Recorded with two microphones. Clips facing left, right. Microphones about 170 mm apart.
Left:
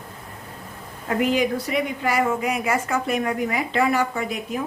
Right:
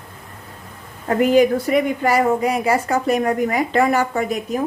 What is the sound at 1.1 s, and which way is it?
A woman's voice, 45° right (ahead or behind).